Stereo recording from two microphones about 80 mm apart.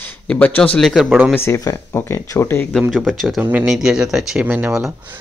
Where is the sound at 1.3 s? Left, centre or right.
Left.